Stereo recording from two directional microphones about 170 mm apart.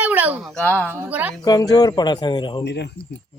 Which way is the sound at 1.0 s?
10° right (ahead or behind).